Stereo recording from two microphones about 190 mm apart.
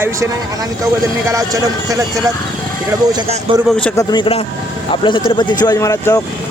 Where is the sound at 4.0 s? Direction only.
25° left (ahead or behind).